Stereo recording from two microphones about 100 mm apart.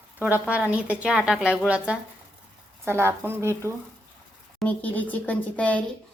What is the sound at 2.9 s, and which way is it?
Speech, 25° right (ahead or behind).